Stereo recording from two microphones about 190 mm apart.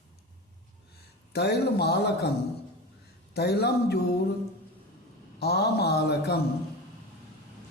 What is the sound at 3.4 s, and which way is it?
Speech, 60° left (ahead or behind).